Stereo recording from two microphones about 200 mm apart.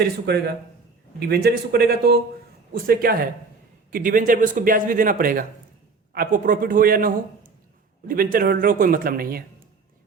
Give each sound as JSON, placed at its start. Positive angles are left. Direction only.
{"t": 0.0, "sound": "a man's voice", "side_deg": -55}